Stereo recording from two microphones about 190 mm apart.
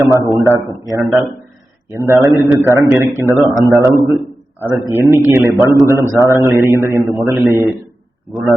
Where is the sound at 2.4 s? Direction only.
10° right (ahead or behind).